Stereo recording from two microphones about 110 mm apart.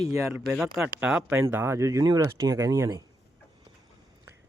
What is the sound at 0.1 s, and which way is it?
Speech, 25° right (ahead or behind).